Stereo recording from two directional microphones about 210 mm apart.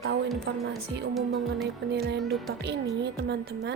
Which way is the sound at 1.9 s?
55° right (ahead or behind).